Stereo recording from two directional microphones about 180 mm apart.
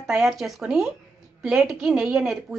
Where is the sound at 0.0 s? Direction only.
Centre (ahead or behind).